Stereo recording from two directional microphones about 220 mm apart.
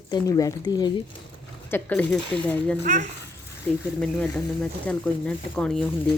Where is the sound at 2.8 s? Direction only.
35° right (ahead or behind).